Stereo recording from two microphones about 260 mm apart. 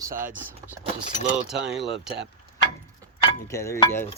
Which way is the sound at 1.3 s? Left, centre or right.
Centre.